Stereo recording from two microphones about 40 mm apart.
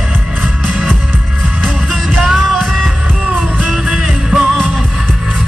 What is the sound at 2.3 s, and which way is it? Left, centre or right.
Music, centre.